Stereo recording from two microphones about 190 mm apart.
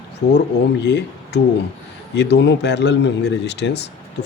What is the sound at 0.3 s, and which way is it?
Speech, 65° left (ahead or behind).